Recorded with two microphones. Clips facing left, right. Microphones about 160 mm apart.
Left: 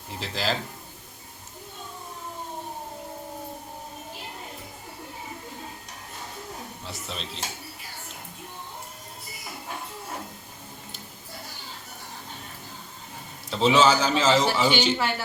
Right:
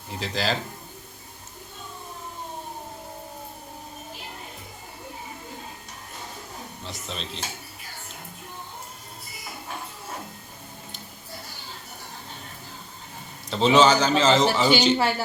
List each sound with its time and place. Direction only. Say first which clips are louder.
0.1 s a man's voice: right 2 dB; centre (ahead or behind)
6.8 s a man's voice: right 2 dB; 5° left (ahead or behind)
13.5 s a man's voice: right 2 dB; 5° left (ahead or behind)
14.8 s speech: right 3 dB; 35° right (ahead or behind)